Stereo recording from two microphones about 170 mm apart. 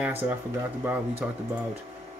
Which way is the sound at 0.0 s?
10° right (ahead or behind).